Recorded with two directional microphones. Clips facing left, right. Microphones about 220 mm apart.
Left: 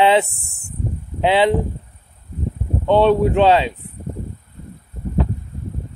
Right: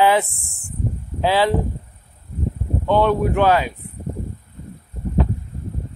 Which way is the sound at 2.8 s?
25° left (ahead or behind).